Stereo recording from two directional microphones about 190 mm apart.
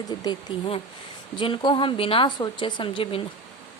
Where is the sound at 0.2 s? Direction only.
25° left (ahead or behind).